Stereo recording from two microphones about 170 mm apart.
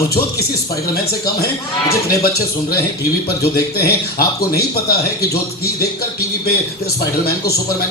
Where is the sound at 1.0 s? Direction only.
65° left (ahead or behind).